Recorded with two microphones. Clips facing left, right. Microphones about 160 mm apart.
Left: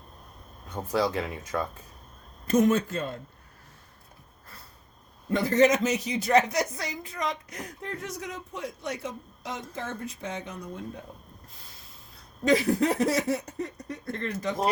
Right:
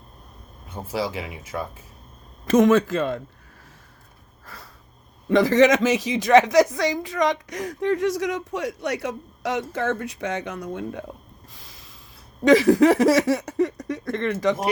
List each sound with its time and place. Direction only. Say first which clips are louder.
0.7 s speech: left 1 dB; 5° right (ahead or behind)
2.5 s speech: right 6 dB; 90° right
4.4 s sniff: right 8 dB; 90° right
5.3 s speech: right 5 dB; 90° right
11.5 s snort: right 4 dB; 90° right
12.5 s speech: right 8 dB; 90° right